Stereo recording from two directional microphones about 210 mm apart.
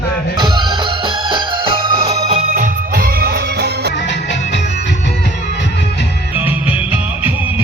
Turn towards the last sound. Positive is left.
turn(degrees=-10)  # may be behind; listen again after turning